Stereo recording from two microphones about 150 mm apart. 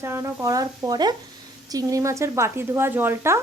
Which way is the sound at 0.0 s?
20° right (ahead or behind).